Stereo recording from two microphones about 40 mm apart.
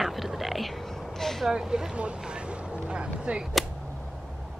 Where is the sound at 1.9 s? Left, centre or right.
Right.